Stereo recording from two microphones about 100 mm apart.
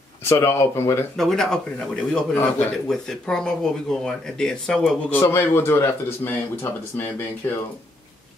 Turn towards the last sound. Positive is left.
turn(degrees=20)  # may be behind; listen again after turning